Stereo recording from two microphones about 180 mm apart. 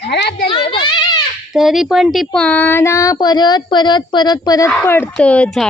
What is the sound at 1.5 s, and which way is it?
Speech, centre (ahead or behind).